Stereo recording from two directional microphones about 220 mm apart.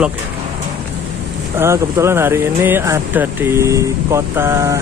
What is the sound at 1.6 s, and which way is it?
Speech, 10° right (ahead or behind).